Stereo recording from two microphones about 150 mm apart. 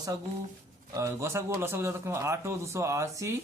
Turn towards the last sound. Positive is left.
turn(degrees=-20)  # may be behind; listen again after turning